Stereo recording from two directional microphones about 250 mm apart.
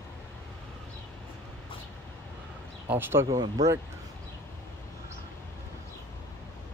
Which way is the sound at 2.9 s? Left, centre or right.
Centre.